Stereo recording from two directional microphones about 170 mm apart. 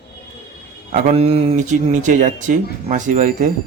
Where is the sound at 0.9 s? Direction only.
40° right (ahead or behind).